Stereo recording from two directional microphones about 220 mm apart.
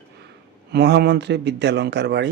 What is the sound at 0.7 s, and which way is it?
A man's voice, 50° right (ahead or behind).